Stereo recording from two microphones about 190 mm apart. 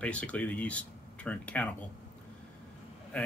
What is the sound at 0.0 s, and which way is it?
Speech, 5° left (ahead or behind).